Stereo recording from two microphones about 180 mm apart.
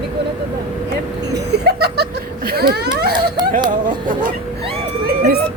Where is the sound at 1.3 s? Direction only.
65° right (ahead or behind).